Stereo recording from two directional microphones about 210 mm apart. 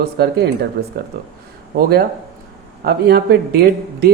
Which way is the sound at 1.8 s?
50° right (ahead or behind).